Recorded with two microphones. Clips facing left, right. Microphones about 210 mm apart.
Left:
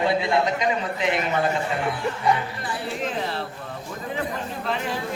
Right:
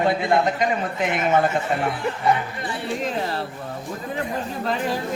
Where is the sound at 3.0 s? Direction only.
40° right (ahead or behind).